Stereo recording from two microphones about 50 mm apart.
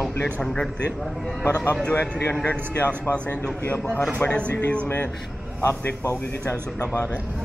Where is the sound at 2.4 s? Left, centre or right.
Left.